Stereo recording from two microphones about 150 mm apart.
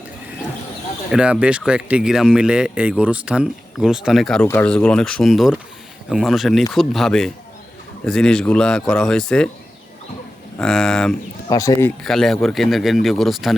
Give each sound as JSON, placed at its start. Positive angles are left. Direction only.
{"t": 1.1, "sound": "speech", "side_deg": -10}
{"t": 10.6, "sound": "speech", "side_deg": 5}
{"t": 11.4, "sound": "speech", "side_deg": 25}
{"t": 12.0, "sound": "speech", "side_deg": 0}